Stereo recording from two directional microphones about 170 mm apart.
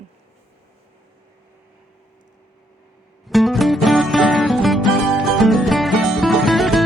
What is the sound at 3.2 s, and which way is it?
Music, centre (ahead or behind).